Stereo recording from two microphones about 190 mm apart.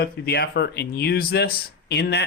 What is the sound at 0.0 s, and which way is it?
Speech, 55° left (ahead or behind).